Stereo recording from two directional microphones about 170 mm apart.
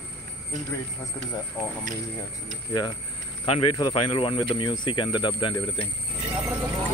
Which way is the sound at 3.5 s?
30° left (ahead or behind).